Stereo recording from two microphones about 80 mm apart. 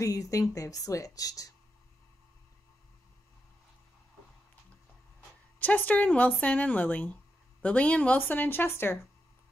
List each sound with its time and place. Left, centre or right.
0.0 s speech: left
5.6 s speech: centre